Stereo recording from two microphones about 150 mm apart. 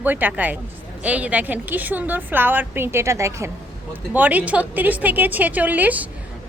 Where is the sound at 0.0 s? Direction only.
10° right (ahead or behind).